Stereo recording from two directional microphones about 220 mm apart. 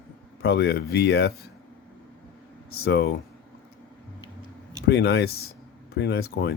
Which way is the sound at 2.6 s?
45° left (ahead or behind).